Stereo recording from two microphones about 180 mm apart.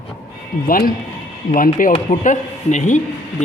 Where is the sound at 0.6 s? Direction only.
55° left (ahead or behind).